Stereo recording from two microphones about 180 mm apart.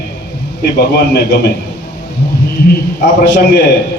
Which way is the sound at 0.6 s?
65° left (ahead or behind).